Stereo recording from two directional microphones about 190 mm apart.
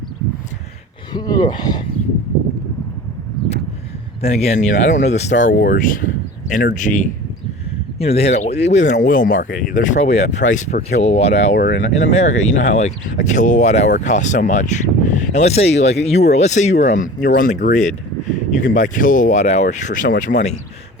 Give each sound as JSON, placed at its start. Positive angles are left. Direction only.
{"t": 1.1, "sound": "speech", "side_deg": 20}
{"t": 4.2, "sound": "speech", "side_deg": 35}
{"t": 7.9, "sound": "speech", "side_deg": 30}
{"t": 11.5, "sound": "speech", "side_deg": 65}
{"t": 11.8, "sound": "speech", "side_deg": 35}